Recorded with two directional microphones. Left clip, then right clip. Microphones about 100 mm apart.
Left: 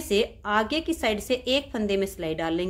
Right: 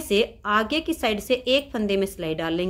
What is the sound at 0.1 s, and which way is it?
A woman's voice, 30° right (ahead or behind).